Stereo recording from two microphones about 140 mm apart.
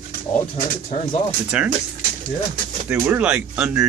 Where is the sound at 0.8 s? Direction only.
55° left (ahead or behind).